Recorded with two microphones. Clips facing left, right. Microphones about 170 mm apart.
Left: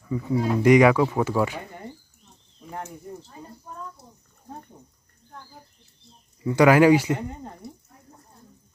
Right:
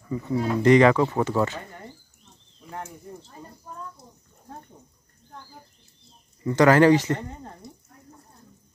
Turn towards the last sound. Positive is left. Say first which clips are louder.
# left 4 dB
turn(degrees=60)  # may be behind; listen again after turning